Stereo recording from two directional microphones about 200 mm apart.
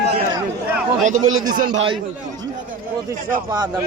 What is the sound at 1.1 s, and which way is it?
Speech, 90° right.